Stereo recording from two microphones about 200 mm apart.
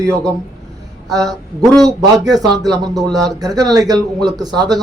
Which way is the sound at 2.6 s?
20° right (ahead or behind).